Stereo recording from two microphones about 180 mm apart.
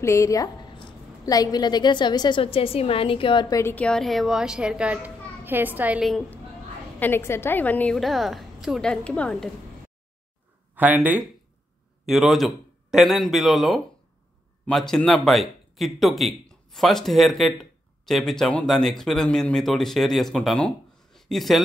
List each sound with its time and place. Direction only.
0.0 s a woman's voice: 15° left (ahead or behind); by 6.4 s centre (ahead or behind)
7.0 s a woman's voice: 10° left (ahead or behind)
10.7 s a woman's voice: 10° right (ahead or behind)